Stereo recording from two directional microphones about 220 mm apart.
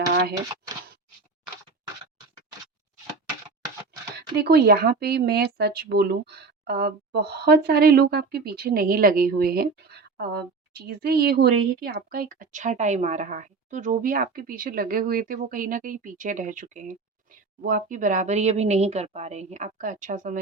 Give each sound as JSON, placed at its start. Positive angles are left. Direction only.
{"t": 4.4, "sound": "speech", "side_deg": -45}